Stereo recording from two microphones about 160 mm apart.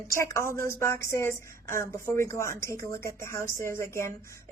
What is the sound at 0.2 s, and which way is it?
A woman's voice, 20° left (ahead or behind).